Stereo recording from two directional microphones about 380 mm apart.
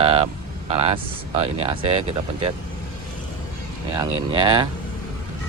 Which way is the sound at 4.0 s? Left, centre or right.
Centre.